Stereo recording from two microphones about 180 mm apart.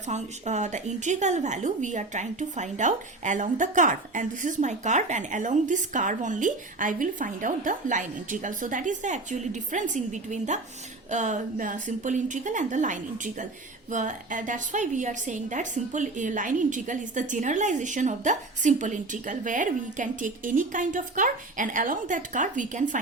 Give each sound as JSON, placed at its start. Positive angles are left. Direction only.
{"t": 0.1, "sound": "a woman's voice", "side_deg": -40}